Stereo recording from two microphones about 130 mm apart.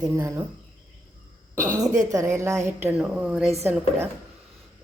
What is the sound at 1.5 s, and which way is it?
A woman's voice, 25° right (ahead or behind).